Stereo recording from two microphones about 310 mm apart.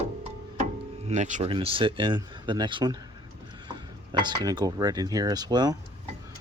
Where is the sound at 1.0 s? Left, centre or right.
Right.